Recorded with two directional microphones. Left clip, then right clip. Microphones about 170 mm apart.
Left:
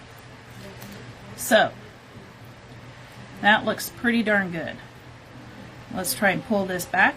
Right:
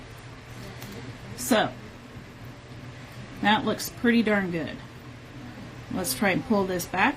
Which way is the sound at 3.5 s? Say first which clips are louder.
Left 4 dB; 50° left (ahead or behind).